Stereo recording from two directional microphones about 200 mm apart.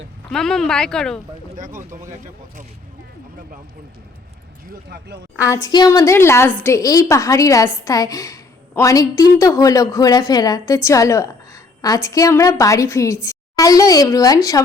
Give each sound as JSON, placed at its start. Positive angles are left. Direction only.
{"t": 0.3, "sound": "speech", "side_deg": 5}
{"t": 1.5, "sound": "speech", "side_deg": -40}
{"t": 5.6, "sound": "a woman's voice", "side_deg": 20}